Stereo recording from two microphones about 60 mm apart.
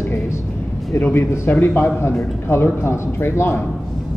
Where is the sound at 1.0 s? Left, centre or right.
Left.